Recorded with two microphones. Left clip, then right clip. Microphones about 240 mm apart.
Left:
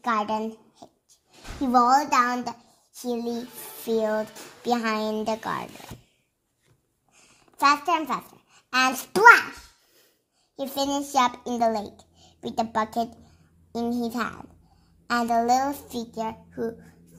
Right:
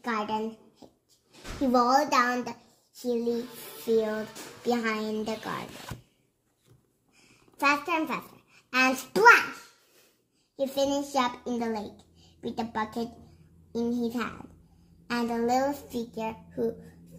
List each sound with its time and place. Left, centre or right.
0.0 s a sound: left
1.6 s a child's voice: left
3.0 s a child's voice: left
7.6 s a woman's voice: left
10.5 s a child's voice: left